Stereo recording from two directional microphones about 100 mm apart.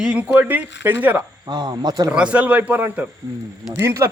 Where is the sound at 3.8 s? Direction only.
30° right (ahead or behind).